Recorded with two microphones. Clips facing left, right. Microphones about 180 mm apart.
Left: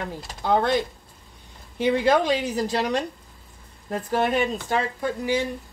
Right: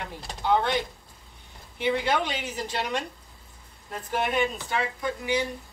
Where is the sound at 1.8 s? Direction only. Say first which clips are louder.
Left 6 dB; 40° left (ahead or behind).